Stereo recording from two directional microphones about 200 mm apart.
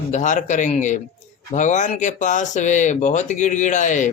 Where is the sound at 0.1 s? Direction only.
40° left (ahead or behind).